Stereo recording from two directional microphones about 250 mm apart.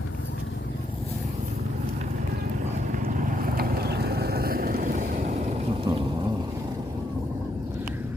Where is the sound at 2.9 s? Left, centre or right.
Right.